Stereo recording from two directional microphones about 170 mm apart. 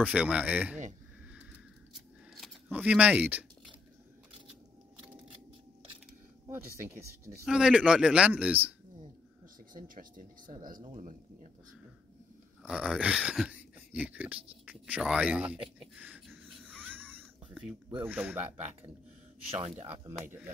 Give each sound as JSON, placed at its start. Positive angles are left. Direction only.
{"t": 0.0, "sound": "speech", "side_deg": -5}
{"t": 2.3, "sound": "speech", "side_deg": -5}
{"t": 6.4, "sound": "a sound", "side_deg": -15}
{"t": 7.4, "sound": "a man's voice", "side_deg": -5}
{"t": 9.8, "sound": "speech", "side_deg": -50}
{"t": 12.6, "sound": "speech", "side_deg": -5}
{"t": 16.8, "sound": "wheeze", "side_deg": -10}
{"t": 17.8, "sound": "speech", "side_deg": -10}
{"t": 18.4, "sound": "speech", "side_deg": -40}